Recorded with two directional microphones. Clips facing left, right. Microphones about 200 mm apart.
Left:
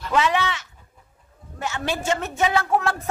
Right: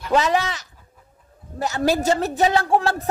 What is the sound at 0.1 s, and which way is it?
A man's voice, 40° right (ahead or behind).